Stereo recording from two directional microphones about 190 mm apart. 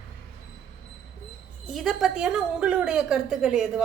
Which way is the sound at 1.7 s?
Centre (ahead or behind).